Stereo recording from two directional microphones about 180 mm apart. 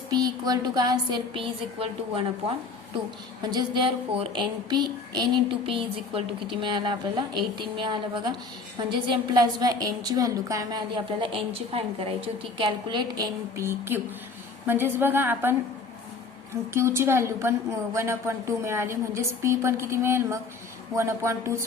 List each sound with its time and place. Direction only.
0.1 s a woman's voice: 20° right (ahead or behind)
3.4 s a woman's voice: 25° right (ahead or behind)
13.6 s a woman's voice: 15° right (ahead or behind)
16.7 s a woman's voice: 15° right (ahead or behind)